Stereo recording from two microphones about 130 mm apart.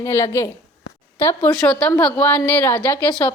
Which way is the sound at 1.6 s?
5° left (ahead or behind).